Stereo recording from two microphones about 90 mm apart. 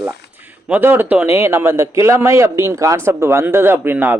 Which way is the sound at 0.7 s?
20° right (ahead or behind).